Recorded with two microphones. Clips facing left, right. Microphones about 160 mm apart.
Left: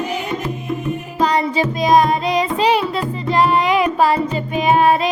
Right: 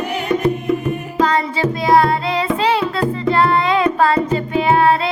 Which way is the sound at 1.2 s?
15° left (ahead or behind).